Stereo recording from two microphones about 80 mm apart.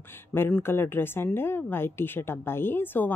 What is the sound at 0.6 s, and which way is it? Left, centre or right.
A woman's voice, left.